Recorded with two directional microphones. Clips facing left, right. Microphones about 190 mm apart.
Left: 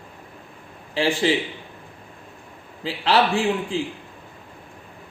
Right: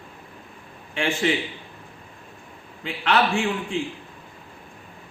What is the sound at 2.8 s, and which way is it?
Speech, 30° left (ahead or behind).